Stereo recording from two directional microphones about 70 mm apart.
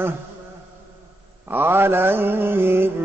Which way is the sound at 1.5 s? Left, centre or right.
Right.